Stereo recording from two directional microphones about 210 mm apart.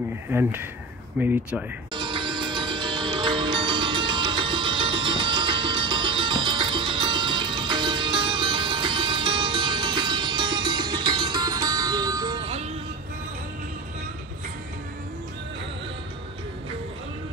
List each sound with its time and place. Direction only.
0.3 s speech: 10° right (ahead or behind)
2.0 s music: 25° right (ahead or behind)